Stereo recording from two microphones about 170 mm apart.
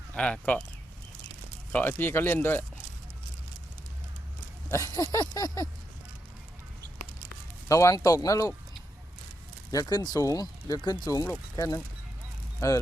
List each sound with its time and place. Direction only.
0.1 s speech: 10° left (ahead or behind)
1.7 s speech: 10° left (ahead or behind)
4.7 s speech: 20° left (ahead or behind)
7.7 s speech: 20° left (ahead or behind)
9.7 s speech: 20° left (ahead or behind)